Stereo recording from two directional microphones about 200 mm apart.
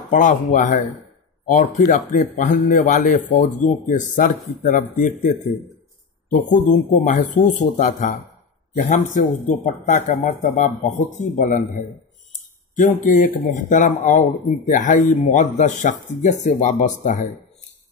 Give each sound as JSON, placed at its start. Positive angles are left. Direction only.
{"t": 0.1, "sound": "a man's voice", "side_deg": 40}